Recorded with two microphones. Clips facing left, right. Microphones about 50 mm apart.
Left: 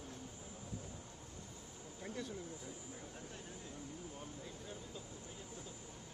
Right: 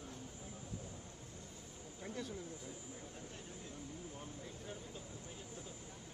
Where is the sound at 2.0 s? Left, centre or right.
Centre.